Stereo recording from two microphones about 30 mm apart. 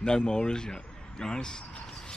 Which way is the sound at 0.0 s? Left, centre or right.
Left.